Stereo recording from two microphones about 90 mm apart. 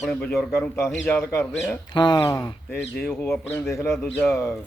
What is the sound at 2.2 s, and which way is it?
A man's voice, 30° left (ahead or behind).